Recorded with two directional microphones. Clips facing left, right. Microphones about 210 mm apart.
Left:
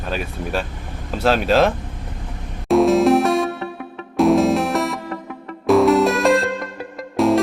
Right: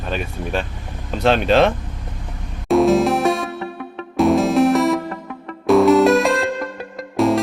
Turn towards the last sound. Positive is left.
turn(degrees=0)  # may be behind; listen again after turning